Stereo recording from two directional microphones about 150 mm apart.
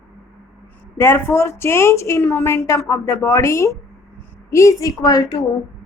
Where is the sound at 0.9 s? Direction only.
15° left (ahead or behind).